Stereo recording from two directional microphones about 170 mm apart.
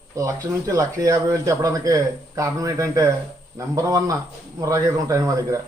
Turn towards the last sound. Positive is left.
turn(degrees=-20)  # may be behind; listen again after turning